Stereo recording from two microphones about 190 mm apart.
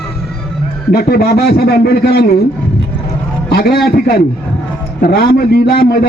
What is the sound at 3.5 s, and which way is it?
A man's voice, 55° left (ahead or behind).